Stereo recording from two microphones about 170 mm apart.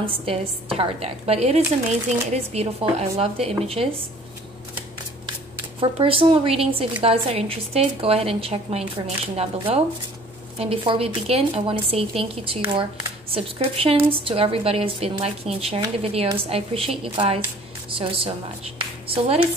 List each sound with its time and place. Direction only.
0.0 s a woman's voice: 30° right (ahead or behind)
5.8 s a woman's voice: 30° right (ahead or behind)
13.3 s a woman's voice: 35° right (ahead or behind)